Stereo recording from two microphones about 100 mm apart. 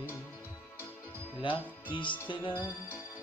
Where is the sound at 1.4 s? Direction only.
55° left (ahead or behind).